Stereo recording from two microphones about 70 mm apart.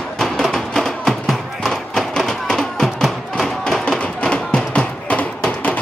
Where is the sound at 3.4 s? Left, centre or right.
Centre.